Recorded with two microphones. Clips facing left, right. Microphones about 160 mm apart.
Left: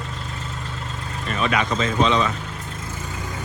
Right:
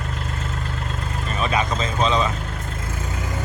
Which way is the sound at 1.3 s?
35° right (ahead or behind).